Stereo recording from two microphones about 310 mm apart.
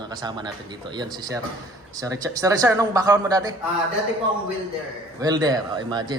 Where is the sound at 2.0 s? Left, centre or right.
Centre.